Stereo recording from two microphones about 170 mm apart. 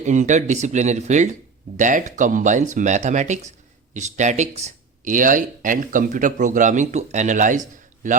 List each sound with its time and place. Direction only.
0.0 s speech: 45° right (ahead or behind)